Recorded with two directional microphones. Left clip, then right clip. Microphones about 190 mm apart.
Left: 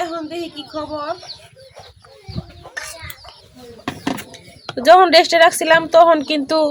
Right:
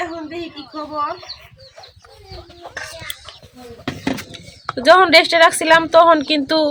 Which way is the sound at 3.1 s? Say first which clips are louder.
Right 6 dB; 5° left (ahead or behind).